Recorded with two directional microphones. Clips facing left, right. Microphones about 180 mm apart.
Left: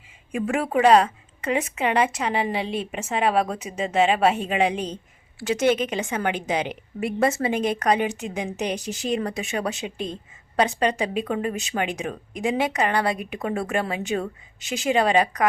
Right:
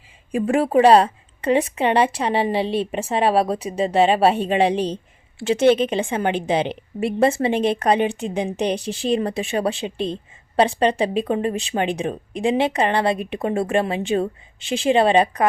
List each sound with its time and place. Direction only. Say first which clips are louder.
0.3 s a woman's voice: right 5 dB; 35° right (ahead or behind)